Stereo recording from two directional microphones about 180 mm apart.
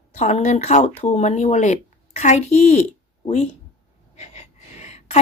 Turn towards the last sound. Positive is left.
turn(degrees=40)  # may be behind; listen again after turning